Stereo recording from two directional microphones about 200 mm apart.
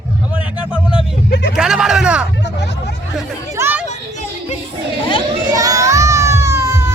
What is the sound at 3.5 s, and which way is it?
Children playing, 10° right (ahead or behind).